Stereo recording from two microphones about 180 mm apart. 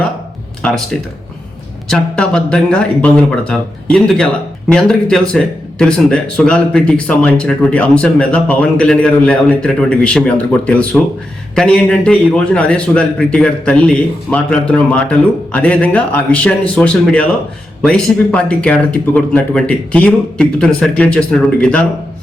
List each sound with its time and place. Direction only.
0.6 s a man's voice: 5° left (ahead or behind)